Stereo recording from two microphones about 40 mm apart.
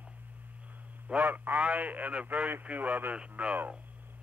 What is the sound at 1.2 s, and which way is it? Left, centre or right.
A man's voice, right.